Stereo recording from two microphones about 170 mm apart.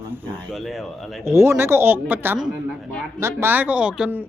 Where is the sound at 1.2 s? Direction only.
15° right (ahead or behind).